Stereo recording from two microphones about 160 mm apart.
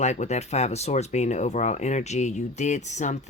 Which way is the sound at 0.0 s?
45° left (ahead or behind).